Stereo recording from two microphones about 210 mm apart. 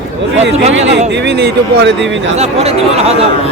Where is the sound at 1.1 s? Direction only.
55° right (ahead or behind).